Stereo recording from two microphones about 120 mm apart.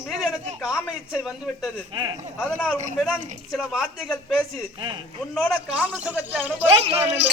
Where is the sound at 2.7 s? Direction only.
Centre (ahead or behind).